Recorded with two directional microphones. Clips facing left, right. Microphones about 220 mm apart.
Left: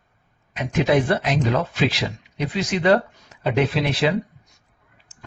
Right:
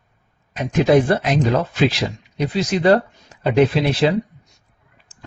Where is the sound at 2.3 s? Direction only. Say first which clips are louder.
Right 4 dB; 40° right (ahead or behind).